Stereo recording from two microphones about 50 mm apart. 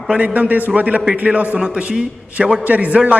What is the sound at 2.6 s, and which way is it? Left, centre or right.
Speech, right.